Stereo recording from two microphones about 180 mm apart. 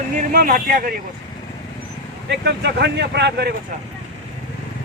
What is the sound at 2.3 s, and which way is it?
Speech, 70° right (ahead or behind).